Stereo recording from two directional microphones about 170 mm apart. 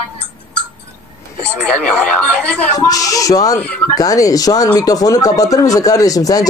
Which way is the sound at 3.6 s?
10° left (ahead or behind).